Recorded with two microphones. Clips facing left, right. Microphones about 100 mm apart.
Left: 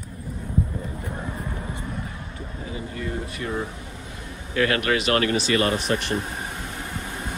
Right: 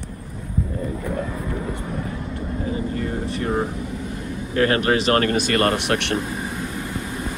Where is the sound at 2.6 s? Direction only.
40° right (ahead or behind).